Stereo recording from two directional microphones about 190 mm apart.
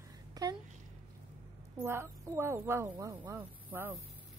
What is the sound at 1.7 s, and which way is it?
A woman's voice, 15° right (ahead or behind).